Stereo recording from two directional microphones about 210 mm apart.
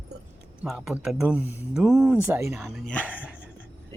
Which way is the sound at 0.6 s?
5° right (ahead or behind).